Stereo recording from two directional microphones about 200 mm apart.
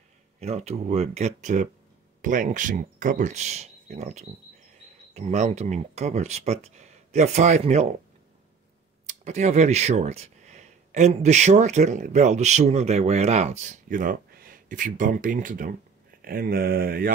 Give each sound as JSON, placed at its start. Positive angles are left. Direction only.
{"t": 0.4, "sound": "speech", "side_deg": -30}
{"t": 9.0, "sound": "speech", "side_deg": -35}